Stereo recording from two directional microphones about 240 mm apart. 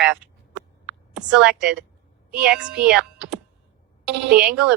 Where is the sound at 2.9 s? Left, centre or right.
Centre.